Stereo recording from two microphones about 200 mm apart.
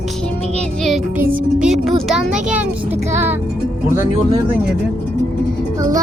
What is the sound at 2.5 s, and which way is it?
Speech, 5° right (ahead or behind).